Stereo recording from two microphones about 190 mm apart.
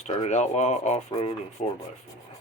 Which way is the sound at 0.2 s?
35° left (ahead or behind).